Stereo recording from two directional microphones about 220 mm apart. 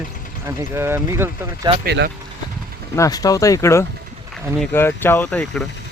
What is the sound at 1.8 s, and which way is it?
Speech, 50° right (ahead or behind).